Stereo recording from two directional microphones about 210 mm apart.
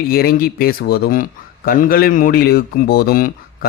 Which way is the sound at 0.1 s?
45° left (ahead or behind).